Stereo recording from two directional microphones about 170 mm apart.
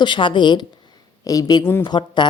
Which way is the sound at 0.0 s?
30° left (ahead or behind).